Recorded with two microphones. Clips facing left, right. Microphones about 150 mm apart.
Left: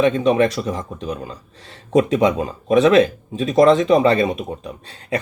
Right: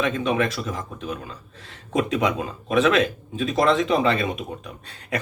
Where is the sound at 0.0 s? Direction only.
35° left (ahead or behind).